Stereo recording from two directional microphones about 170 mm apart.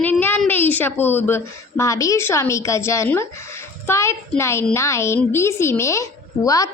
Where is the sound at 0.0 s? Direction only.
10° left (ahead or behind).